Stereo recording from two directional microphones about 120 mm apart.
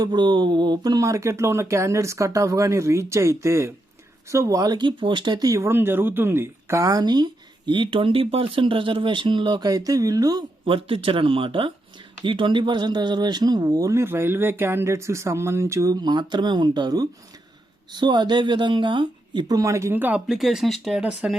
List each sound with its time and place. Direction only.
0.0 s speech: 40° right (ahead or behind)
10.7 s speech: 50° right (ahead or behind); by 21.3 s 10° right (ahead or behind)